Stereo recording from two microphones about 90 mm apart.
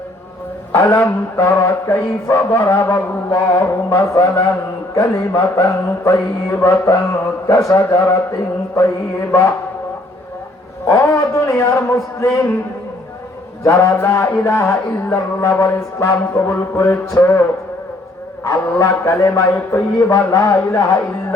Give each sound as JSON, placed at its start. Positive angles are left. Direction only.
{"t": 0.7, "sound": "mantra", "side_deg": 30}
{"t": 10.8, "sound": "a sound", "side_deg": 35}
{"t": 13.7, "sound": "mantra", "side_deg": 35}
{"t": 16.1, "sound": "music", "side_deg": 25}
{"t": 18.4, "sound": "mantra", "side_deg": 35}